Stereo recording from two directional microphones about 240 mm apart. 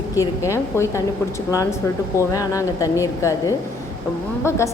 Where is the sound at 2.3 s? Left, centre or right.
Centre.